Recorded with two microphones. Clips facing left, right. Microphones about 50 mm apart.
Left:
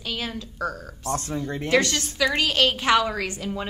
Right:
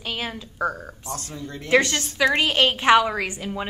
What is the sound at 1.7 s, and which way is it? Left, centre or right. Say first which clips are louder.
A woman's voice: right 3 dB; right.